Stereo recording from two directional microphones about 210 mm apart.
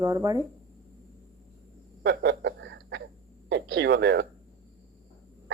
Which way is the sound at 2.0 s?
55° right (ahead or behind).